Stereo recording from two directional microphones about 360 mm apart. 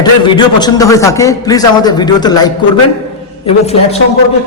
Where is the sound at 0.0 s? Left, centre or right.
Centre.